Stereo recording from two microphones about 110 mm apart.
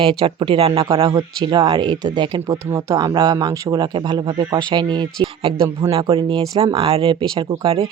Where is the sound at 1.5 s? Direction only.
40° right (ahead or behind).